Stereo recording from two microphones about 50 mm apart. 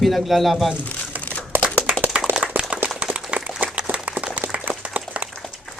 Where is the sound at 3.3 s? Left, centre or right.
Right.